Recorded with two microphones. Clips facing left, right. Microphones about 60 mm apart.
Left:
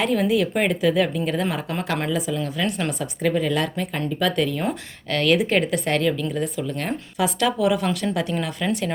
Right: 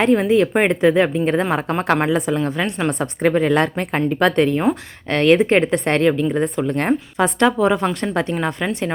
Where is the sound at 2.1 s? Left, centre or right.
Right.